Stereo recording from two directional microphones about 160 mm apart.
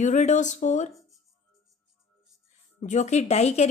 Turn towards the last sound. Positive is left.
turn(degrees=45)  # may be behind; listen again after turning